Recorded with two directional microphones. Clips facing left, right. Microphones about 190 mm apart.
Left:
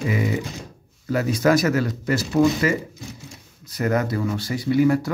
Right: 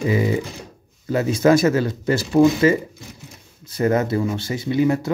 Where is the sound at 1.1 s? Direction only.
25° right (ahead or behind).